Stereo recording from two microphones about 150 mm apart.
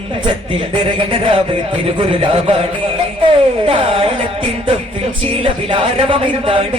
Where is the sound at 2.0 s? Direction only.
40° right (ahead or behind).